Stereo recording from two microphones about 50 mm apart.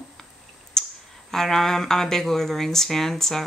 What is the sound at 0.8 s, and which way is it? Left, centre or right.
Clicking, centre.